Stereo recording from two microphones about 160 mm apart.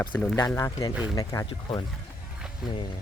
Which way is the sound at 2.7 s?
30° left (ahead or behind).